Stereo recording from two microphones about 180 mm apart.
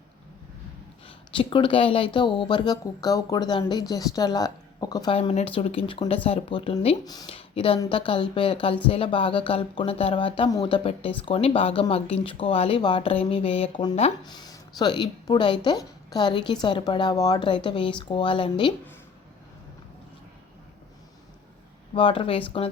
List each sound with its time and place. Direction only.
1.0 s speech: 30° left (ahead or behind)
5.1 s speech: 35° left (ahead or behind)
21.9 s speech: 30° left (ahead or behind)